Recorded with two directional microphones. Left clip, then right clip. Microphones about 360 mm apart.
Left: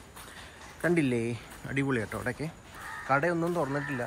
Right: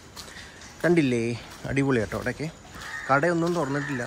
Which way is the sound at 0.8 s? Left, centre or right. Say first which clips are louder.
Right 5 dB; centre.